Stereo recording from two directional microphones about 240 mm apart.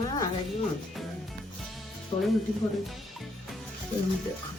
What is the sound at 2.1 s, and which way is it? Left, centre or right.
Speech, centre.